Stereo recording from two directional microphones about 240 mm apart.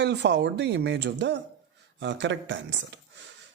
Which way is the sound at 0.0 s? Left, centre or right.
Right.